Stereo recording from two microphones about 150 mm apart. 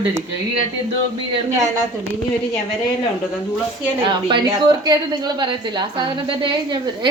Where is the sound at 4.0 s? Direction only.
35° right (ahead or behind).